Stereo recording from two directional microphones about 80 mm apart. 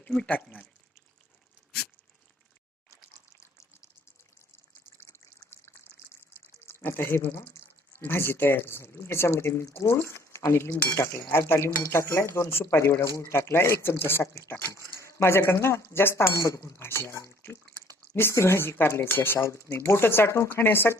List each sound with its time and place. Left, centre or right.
0.0 s speech: centre
4.9 s water: left
6.7 s speech: left
15.2 s speech: left
18.2 s speech: left